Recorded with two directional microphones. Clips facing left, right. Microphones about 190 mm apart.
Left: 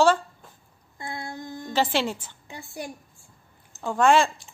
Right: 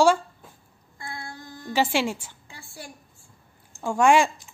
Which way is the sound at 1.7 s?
10° right (ahead or behind).